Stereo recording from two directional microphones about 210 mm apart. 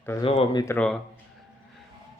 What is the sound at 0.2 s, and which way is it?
Speech, 25° left (ahead or behind).